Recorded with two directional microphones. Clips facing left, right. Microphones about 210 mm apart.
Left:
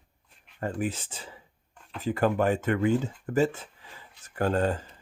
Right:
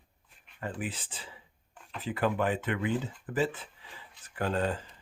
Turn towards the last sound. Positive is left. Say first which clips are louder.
# left 5 dB
turn(degrees=45)  # may be behind; listen again after turning